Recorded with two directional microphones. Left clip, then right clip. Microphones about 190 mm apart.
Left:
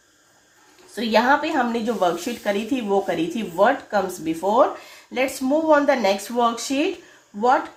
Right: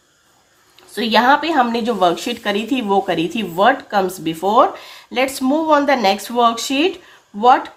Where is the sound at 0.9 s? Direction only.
35° right (ahead or behind).